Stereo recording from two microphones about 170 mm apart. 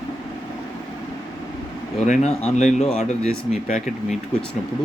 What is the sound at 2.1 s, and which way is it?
Speech, 40° left (ahead or behind).